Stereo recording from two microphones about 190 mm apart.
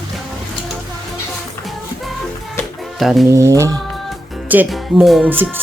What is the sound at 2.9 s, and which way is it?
Speech, centre (ahead or behind).